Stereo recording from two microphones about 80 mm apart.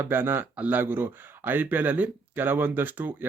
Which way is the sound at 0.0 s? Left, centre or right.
Right.